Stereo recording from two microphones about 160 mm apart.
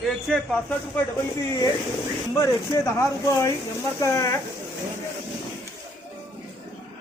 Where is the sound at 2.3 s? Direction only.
20° left (ahead or behind).